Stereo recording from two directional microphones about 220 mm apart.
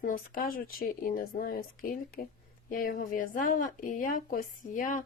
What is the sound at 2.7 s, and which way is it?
A woman's voice, 40° left (ahead or behind).